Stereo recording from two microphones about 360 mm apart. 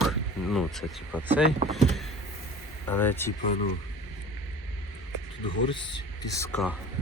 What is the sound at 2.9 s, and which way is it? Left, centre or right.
Speech, centre.